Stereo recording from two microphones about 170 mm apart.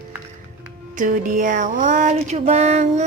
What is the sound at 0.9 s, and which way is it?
Speech, 50° right (ahead or behind).